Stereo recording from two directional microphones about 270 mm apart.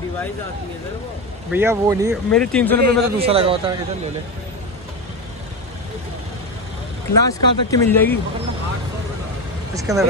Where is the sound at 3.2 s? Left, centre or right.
Right.